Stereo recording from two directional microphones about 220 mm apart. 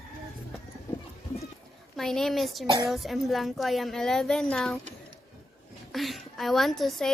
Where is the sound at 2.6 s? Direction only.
20° right (ahead or behind).